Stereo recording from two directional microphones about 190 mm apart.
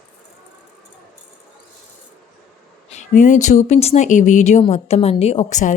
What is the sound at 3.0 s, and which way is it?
A woman's voice, 40° left (ahead or behind).